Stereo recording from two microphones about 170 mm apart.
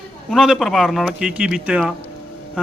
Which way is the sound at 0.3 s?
Centre (ahead or behind).